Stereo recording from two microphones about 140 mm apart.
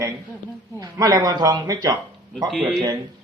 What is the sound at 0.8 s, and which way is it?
Speech, 25° right (ahead or behind).